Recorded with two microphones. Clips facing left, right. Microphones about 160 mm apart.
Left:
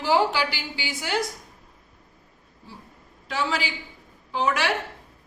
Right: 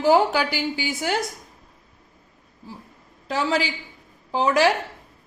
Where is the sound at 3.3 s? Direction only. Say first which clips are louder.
Right 4 dB; 40° right (ahead or behind).